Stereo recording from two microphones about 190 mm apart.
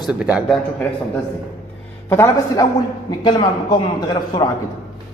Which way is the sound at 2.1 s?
15° left (ahead or behind).